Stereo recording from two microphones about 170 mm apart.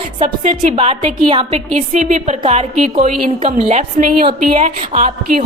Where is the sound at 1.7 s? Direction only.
45° right (ahead or behind).